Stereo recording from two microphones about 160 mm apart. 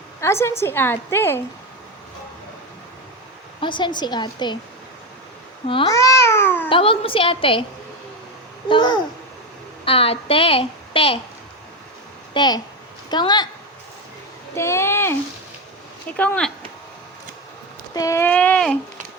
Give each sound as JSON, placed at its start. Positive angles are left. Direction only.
{"t": 0.2, "sound": "a woman's voice", "side_deg": 15}
{"t": 3.6, "sound": "a woman's voice", "side_deg": 30}
{"t": 5.9, "sound": "cat", "side_deg": 20}
{"t": 6.7, "sound": "a woman's voice", "side_deg": 35}
{"t": 8.7, "sound": "a woman's voice", "side_deg": 25}
{"t": 12.3, "sound": "a woman's voice", "side_deg": 25}
{"t": 14.5, "sound": "speech", "side_deg": 15}
{"t": 16.1, "sound": "a woman's voice", "side_deg": 10}
{"t": 17.9, "sound": "a woman's voice", "side_deg": 20}